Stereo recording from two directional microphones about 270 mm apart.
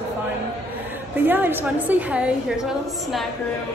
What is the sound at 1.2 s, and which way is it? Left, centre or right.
A woman's voice, centre.